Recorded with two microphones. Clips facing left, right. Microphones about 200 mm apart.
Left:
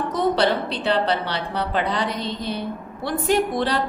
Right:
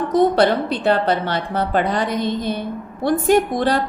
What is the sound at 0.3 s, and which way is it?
A woman's voice, 50° right (ahead or behind).